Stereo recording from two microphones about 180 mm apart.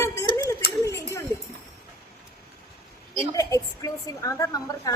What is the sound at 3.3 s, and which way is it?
A woman's voice, 20° left (ahead or behind).